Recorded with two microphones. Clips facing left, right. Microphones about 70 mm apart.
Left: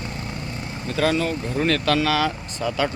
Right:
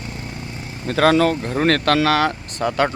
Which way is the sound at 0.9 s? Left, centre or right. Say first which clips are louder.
Right 6 dB; right.